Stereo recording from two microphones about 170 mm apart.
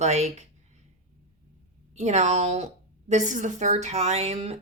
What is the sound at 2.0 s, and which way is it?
A woman's voice, 40° right (ahead or behind).